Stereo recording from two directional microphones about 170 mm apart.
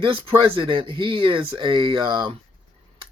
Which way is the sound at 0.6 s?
30° right (ahead or behind).